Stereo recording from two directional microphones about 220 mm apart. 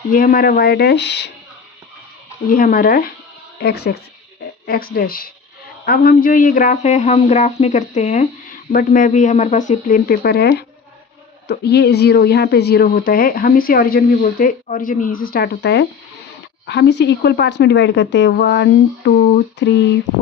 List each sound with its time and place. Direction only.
0.1 s speech: 40° left (ahead or behind)
2.5 s speech: 40° left (ahead or behind)